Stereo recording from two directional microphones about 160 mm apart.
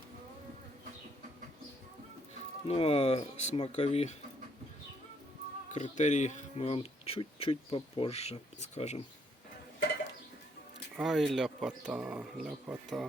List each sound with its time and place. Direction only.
2.6 s speech: 35° left (ahead or behind)
5.7 s speech: 50° left (ahead or behind)
10.9 s speech: centre (ahead or behind)